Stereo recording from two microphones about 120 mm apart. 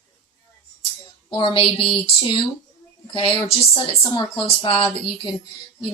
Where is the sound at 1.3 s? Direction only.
45° left (ahead or behind).